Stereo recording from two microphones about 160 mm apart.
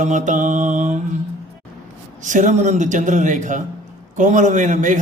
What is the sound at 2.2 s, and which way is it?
Mantra, 50° right (ahead or behind).